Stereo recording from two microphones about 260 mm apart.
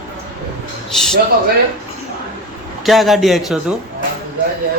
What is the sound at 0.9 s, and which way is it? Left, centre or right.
Speech, centre.